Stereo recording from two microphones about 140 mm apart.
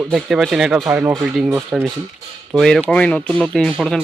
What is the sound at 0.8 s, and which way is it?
Speech, 20° right (ahead or behind).